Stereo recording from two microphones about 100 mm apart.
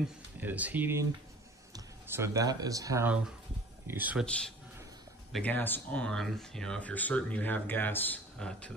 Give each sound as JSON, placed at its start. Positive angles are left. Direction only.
{"t": 0.4, "sound": "speech", "side_deg": -15}
{"t": 2.0, "sound": "speech", "side_deg": -25}
{"t": 3.8, "sound": "speech", "side_deg": -20}
{"t": 5.4, "sound": "speech", "side_deg": 20}